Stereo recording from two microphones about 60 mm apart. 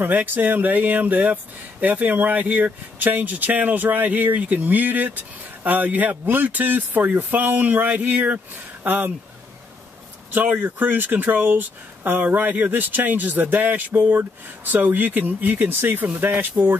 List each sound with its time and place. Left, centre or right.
0.0 s speech: right
10.3 s speech: right